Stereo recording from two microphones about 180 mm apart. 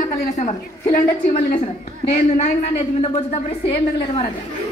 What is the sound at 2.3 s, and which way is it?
A woman's voice, 35° left (ahead or behind).